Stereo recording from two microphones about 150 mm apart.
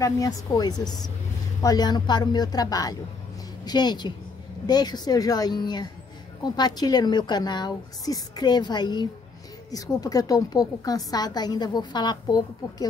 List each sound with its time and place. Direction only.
0.0 s a woman's voice: 25° left (ahead or behind)